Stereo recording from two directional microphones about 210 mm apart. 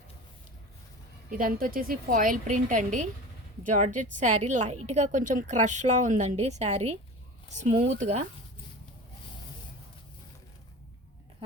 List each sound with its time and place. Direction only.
1.3 s a woman's voice: 45° right (ahead or behind)